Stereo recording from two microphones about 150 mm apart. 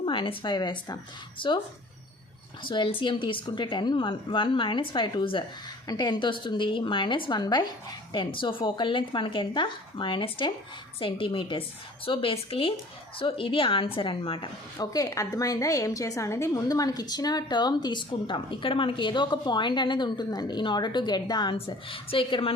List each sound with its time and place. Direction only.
0.0 s speech: 35° left (ahead or behind)
2.6 s a woman's voice: 30° left (ahead or behind)
14.8 s a woman's voice: 25° left (ahead or behind)